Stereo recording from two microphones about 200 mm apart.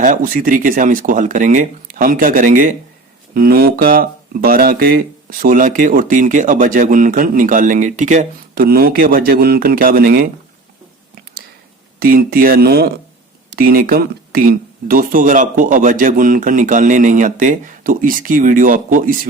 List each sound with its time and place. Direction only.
0.0 s speech: 40° right (ahead or behind)
11.9 s speech: 45° right (ahead or behind)